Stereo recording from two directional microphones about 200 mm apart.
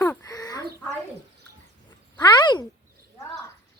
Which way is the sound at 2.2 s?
20° left (ahead or behind).